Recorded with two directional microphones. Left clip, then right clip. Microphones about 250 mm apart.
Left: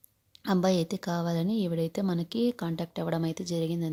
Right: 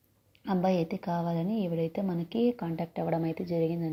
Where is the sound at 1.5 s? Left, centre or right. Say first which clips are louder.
Left 1 dB; left.